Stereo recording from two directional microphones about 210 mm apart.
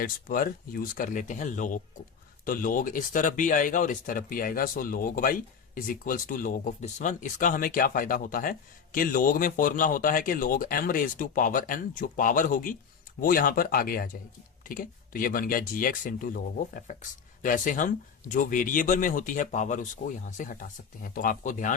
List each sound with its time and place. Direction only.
0.0 s speech: 40° left (ahead or behind)